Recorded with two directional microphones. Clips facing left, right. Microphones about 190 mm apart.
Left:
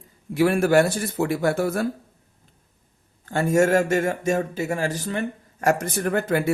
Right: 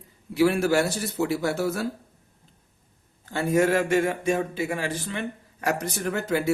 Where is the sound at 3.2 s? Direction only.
50° left (ahead or behind).